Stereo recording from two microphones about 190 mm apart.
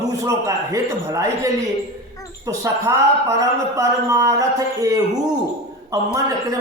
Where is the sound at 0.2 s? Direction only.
15° right (ahead or behind).